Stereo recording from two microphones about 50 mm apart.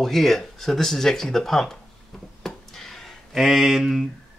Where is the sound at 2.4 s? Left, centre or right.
Centre.